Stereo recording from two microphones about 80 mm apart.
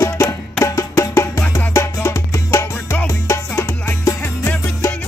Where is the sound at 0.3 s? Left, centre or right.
Left.